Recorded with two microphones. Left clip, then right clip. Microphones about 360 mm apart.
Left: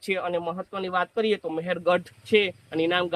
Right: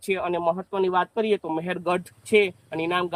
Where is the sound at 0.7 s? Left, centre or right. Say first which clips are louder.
Even; right.